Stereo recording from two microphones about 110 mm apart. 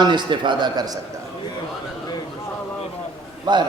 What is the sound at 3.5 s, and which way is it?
Speech, 45° right (ahead or behind).